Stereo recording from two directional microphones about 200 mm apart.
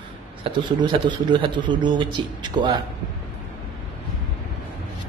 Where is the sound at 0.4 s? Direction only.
25° right (ahead or behind).